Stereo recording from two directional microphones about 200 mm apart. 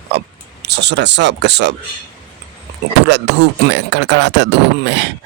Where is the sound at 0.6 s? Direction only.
60° right (ahead or behind).